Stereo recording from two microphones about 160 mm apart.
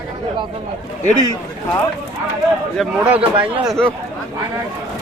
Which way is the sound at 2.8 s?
Centre (ahead or behind).